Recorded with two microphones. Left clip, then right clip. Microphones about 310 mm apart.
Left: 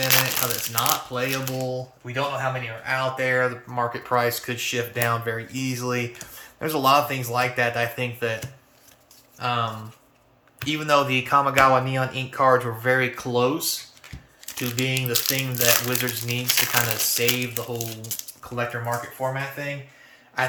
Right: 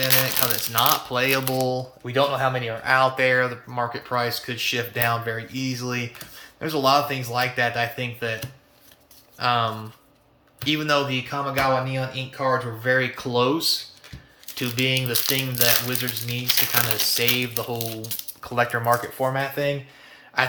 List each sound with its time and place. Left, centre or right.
0.0 s crumpling: centre
0.7 s speech: centre
1.5 s speech: right; by 13.5 s centre
14.6 s speech: centre
18.9 s speech: right